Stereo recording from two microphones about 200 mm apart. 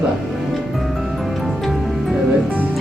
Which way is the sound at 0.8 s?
Centre (ahead or behind).